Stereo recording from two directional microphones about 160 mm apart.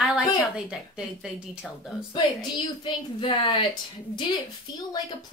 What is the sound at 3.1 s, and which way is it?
Speech, 30° left (ahead or behind).